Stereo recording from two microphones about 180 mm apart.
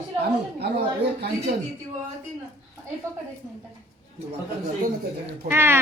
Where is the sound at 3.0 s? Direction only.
15° right (ahead or behind).